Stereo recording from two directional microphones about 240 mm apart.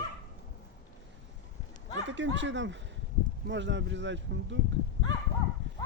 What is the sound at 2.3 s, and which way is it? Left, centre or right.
Speech, right.